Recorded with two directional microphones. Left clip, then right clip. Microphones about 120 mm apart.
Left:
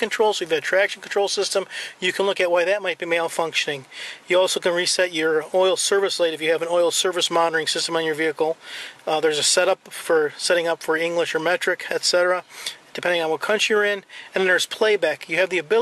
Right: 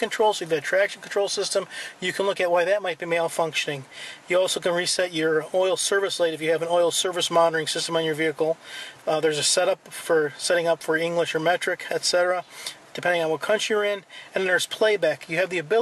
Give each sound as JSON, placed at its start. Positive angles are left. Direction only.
{"t": 0.0, "sound": "speech", "side_deg": 15}
{"t": 12.2, "sound": "speech", "side_deg": 45}
{"t": 12.6, "sound": "speech", "side_deg": 15}